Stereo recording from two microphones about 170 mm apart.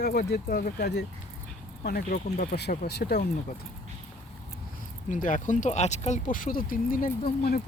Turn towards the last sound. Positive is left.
turn(degrees=60)  # may be behind; listen again after turning